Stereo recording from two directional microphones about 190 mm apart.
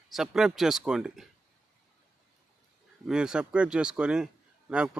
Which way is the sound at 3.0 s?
5° right (ahead or behind).